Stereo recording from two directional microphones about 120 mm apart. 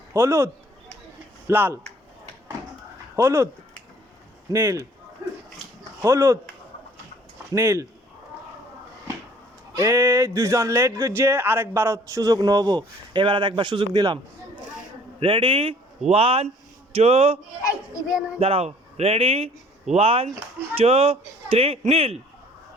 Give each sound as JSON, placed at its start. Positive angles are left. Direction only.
{"t": 0.1, "sound": "speech", "side_deg": -20}
{"t": 3.2, "sound": "speech", "side_deg": -20}
{"t": 4.5, "sound": "speech", "side_deg": -25}
{"t": 6.0, "sound": "speech", "side_deg": -25}
{"t": 7.5, "sound": "speech", "side_deg": -25}
{"t": 9.7, "sound": "speech", "side_deg": -25}
{"t": 15.2, "sound": "speech", "side_deg": -45}
{"t": 17.6, "sound": "a child's voice", "side_deg": 25}
{"t": 18.3, "sound": "speech", "side_deg": -55}